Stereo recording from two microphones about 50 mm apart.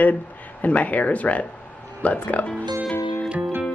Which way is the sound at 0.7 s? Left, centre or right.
Left.